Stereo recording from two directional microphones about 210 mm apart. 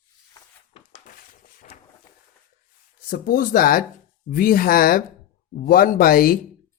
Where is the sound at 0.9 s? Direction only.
40° left (ahead or behind).